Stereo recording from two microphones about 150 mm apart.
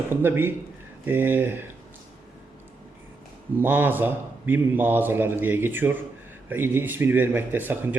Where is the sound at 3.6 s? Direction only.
15° right (ahead or behind).